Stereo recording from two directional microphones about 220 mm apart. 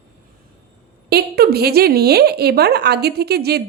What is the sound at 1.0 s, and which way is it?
Speech, 45° right (ahead or behind).